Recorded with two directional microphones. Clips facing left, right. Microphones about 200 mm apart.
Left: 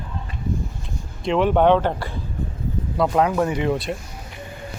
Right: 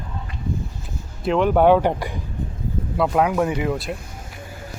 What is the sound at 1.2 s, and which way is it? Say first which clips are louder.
Speech: right 1 dB; centre (ahead or behind).